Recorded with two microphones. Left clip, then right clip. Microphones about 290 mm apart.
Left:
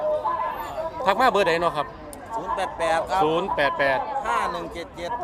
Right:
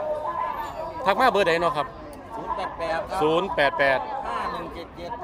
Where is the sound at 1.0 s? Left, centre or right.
Centre.